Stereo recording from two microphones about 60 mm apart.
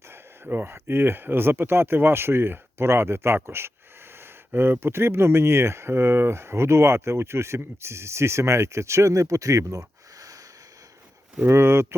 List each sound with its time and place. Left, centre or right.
0.1 s speech: right
11.4 s speech: right